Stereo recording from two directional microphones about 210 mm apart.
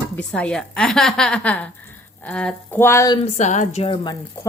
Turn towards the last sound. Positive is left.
turn(degrees=25)  # may be behind; listen again after turning